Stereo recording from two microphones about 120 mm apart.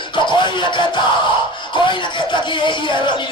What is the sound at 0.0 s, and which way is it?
Music, 40° left (ahead or behind).